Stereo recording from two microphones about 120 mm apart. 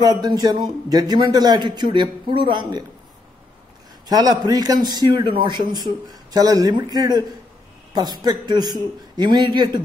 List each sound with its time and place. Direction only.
0.0 s a man's voice: 35° right (ahead or behind)
4.1 s a man's voice: 35° right (ahead or behind)